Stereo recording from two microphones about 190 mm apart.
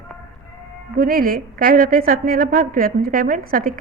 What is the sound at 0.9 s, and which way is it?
A woman's voice, 50° right (ahead or behind).